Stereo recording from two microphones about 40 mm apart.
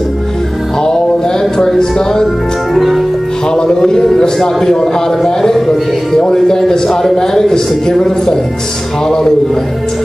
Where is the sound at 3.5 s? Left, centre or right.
Centre.